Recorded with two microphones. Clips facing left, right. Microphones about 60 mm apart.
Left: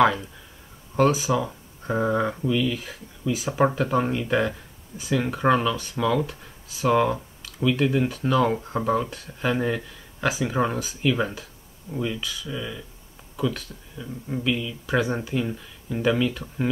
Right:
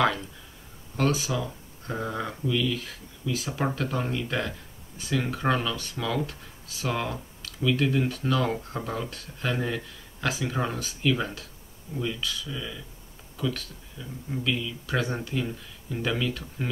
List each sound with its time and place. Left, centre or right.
0.0 s speech: centre